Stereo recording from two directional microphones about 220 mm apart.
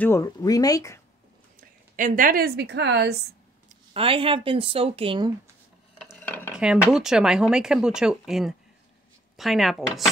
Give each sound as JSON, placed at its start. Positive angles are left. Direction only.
{"t": 0.0, "sound": "speech", "side_deg": 15}
{"t": 1.6, "sound": "a woman's voice", "side_deg": -35}
{"t": 3.6, "sound": "speech", "side_deg": -25}
{"t": 5.9, "sound": "a sound", "side_deg": 5}
{"t": 6.5, "sound": "speech", "side_deg": -5}